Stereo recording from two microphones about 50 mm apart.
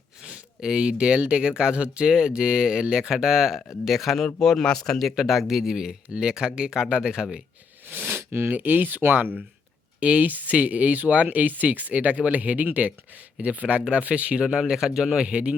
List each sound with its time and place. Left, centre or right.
0.2 s a sound: centre
1.3 s speech: right
3.8 s speech: centre
4.9 s speech: centre
7.9 s a sound: right
8.1 s a sound: right
8.4 s speech: right
10.0 s speech: right
14.4 s speech: centre